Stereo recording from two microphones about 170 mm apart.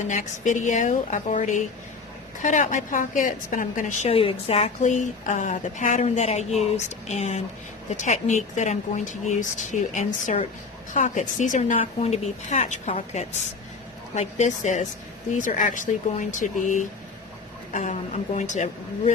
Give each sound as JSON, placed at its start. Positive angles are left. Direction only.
{"t": 0.0, "sound": "a woman's voice", "side_deg": 45}